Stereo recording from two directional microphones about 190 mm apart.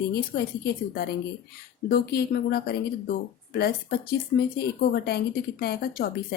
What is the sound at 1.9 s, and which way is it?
A woman's voice, 55° left (ahead or behind).